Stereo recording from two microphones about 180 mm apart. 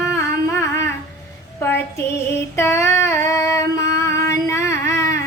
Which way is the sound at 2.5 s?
15° left (ahead or behind).